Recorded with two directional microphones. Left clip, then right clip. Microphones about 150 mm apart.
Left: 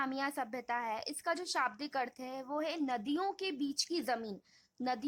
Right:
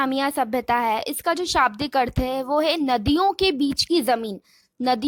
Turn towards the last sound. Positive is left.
turn(degrees=-30)  # may be behind; listen again after turning